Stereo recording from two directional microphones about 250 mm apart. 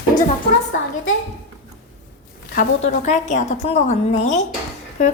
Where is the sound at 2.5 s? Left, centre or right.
Left.